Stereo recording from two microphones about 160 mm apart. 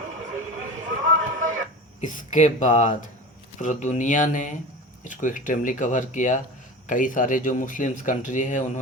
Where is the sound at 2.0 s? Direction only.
50° left (ahead or behind).